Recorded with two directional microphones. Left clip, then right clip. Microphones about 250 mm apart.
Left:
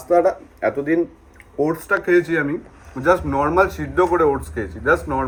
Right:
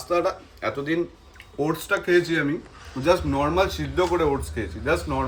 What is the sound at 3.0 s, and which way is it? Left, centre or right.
Speech, right.